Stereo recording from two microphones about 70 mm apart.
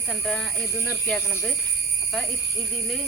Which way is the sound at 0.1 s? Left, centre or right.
Centre.